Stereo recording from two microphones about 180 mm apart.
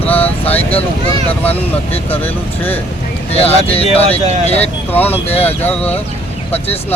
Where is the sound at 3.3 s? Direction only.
35° left (ahead or behind).